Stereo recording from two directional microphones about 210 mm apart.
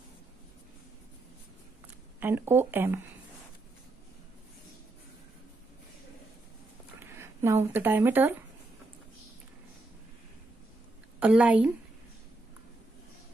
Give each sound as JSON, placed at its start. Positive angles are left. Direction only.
{"t": 2.1, "sound": "speech", "side_deg": -10}
{"t": 7.0, "sound": "speech", "side_deg": -10}
{"t": 11.1, "sound": "speech", "side_deg": -5}